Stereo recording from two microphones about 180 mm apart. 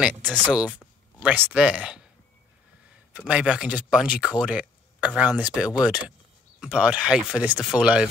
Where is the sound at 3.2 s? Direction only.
5° right (ahead or behind).